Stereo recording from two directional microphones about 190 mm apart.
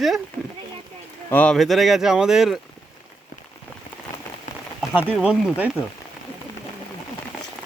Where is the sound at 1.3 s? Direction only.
5° left (ahead or behind).